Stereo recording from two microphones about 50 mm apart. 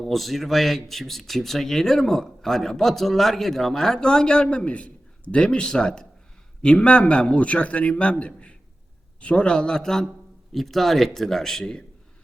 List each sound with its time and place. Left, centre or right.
0.0 s a man's voice: centre